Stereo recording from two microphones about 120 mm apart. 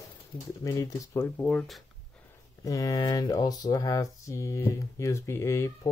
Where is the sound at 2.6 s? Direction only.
30° left (ahead or behind).